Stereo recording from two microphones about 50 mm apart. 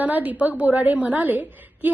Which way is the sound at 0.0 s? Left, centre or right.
Right.